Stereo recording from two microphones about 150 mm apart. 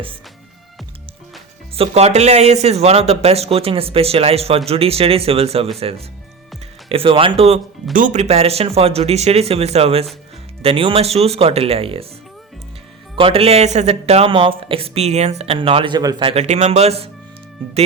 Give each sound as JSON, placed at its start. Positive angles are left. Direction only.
{"t": 1.7, "sound": "speech", "side_deg": -40}
{"t": 7.9, "sound": "speech", "side_deg": -55}
{"t": 13.1, "sound": "speech", "side_deg": -40}
{"t": 16.3, "sound": "speech", "side_deg": -50}